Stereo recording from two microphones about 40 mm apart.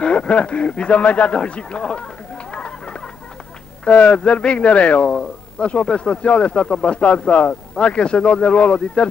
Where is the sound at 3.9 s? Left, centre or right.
Left.